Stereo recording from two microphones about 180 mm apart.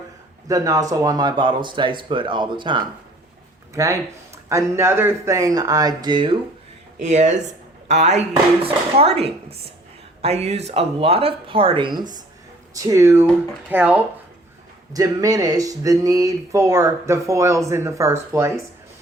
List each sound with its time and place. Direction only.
0.4 s speech: 20° right (ahead or behind)
7.0 s speech: 40° right (ahead or behind); by 14.0 s 10° right (ahead or behind)
14.9 s speech: 20° right (ahead or behind)